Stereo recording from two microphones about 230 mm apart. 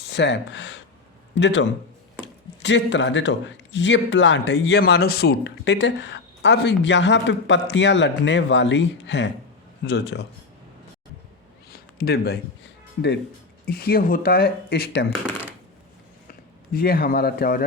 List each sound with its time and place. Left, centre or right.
0.1 s a man's voice: left
11.7 s a sound: left
13.7 s speech: left
16.7 s speech: left